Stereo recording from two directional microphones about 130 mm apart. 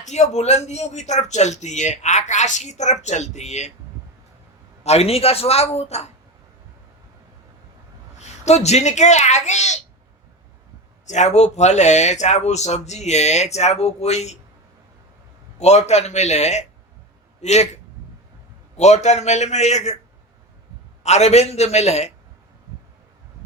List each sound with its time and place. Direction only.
0.0 s speech: 60° left (ahead or behind)
4.8 s a man's voice: 55° left (ahead or behind)
8.4 s speech: 60° left (ahead or behind)
11.0 s speech: 65° left (ahead or behind)
15.5 s speech: 55° left (ahead or behind)
18.8 s speech: 60° left (ahead or behind)
21.0 s speech: 60° left (ahead or behind)